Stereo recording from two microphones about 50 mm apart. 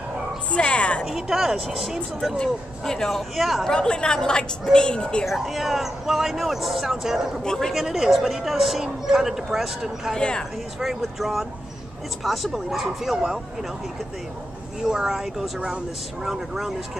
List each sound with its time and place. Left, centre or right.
0.5 s music: left
1.0 s speech: centre
2.3 s speech: centre
3.3 s speech: centre
3.6 s speech: centre
5.2 s speech: centre
10.1 s speech: centre
10.8 s speech: centre
14.9 s speech: centre